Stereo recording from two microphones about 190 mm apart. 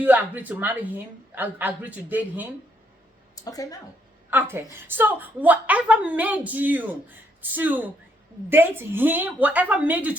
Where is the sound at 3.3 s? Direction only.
20° left (ahead or behind).